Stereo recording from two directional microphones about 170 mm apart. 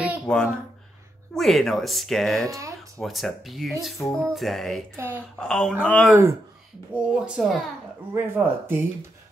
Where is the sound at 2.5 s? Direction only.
20° right (ahead or behind).